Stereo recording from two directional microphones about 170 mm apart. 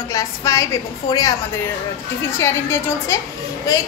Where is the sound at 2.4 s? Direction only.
15° left (ahead or behind).